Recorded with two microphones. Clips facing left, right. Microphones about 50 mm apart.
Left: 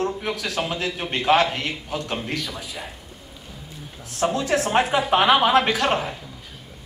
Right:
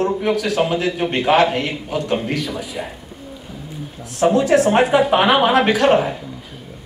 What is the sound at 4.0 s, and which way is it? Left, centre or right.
A man's voice, right.